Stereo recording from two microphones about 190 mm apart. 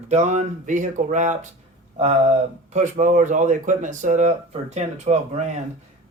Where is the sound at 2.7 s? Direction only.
40° right (ahead or behind).